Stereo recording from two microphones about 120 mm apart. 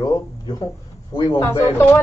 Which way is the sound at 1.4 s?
15° left (ahead or behind).